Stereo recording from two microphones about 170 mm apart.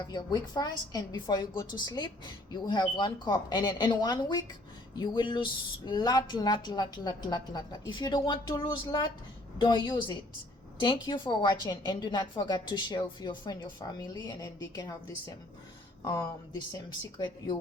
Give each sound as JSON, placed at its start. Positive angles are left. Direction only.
{"t": 0.0, "sound": "a woman's voice", "side_deg": 25}
{"t": 17.2, "sound": "a woman's voice", "side_deg": 25}